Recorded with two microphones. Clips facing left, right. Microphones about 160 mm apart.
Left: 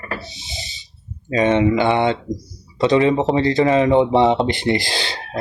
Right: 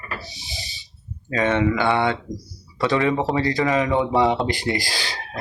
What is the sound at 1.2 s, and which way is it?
Speech, 20° left (ahead or behind).